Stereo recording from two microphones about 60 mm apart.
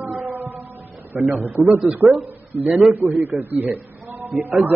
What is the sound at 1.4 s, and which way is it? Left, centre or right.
Speech, right.